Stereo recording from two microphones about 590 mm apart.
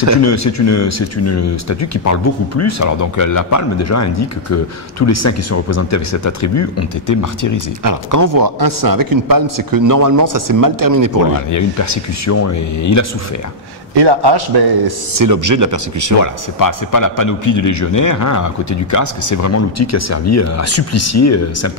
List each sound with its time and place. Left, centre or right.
0.2 s speech: left
7.8 s a man's voice: right
11.5 s speech: left
13.9 s a man's voice: right
16.2 s speech: left